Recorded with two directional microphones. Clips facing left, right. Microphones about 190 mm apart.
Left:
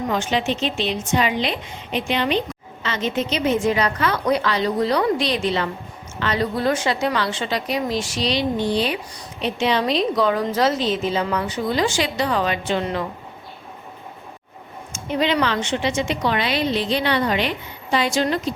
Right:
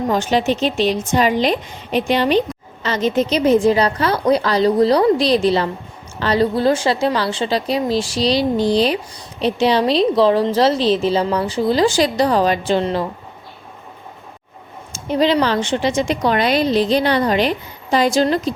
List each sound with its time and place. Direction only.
0.1 s a woman's voice: 40° right (ahead or behind)
14.9 s a woman's voice: 35° right (ahead or behind)